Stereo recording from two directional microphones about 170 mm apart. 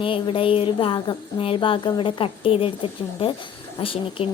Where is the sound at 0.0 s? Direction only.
30° left (ahead or behind).